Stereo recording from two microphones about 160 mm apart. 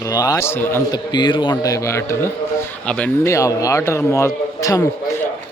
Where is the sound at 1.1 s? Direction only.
30° left (ahead or behind); by 3.1 s 5° left (ahead or behind).